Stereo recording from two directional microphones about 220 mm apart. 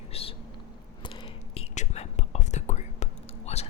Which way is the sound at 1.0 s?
25° left (ahead or behind).